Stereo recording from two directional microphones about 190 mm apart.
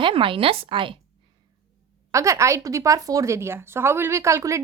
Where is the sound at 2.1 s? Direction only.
15° right (ahead or behind).